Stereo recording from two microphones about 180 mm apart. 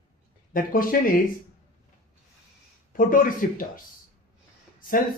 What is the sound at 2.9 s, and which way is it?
Speech, 50° left (ahead or behind).